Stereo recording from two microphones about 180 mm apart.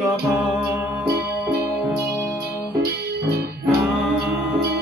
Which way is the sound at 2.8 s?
60° right (ahead or behind).